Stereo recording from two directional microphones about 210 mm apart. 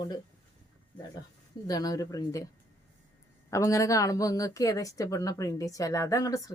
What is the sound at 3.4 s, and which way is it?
A woman's voice, 15° left (ahead or behind).